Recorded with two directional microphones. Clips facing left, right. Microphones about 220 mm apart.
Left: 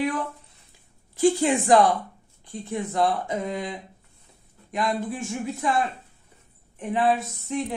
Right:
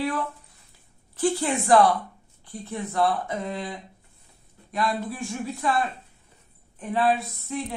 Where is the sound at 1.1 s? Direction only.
15° left (ahead or behind).